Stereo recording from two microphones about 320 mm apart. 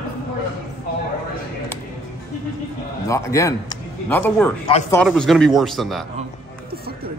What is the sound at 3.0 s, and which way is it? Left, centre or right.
A man's voice, centre.